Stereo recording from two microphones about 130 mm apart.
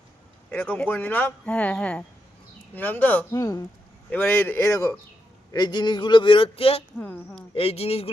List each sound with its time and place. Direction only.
0.5 s speech: 15° left (ahead or behind)
3.3 s speech: 25° left (ahead or behind)
4.1 s speech: 15° left (ahead or behind)
5.5 s a man's voice: 35° left (ahead or behind)
7.0 s speech: 10° left (ahead or behind)
7.5 s speech: 50° left (ahead or behind)